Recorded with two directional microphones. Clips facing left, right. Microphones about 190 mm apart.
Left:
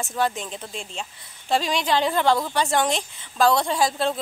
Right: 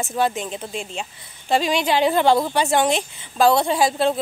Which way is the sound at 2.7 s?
5° right (ahead or behind).